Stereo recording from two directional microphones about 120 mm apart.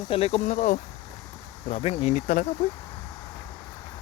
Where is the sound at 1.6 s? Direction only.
60° left (ahead or behind); by 2.5 s 90° left.